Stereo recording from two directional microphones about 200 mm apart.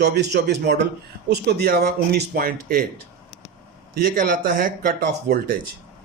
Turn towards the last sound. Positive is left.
turn(degrees=-45)  # may be behind; listen again after turning